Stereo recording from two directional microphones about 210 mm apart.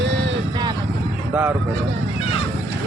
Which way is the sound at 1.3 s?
5° right (ahead or behind).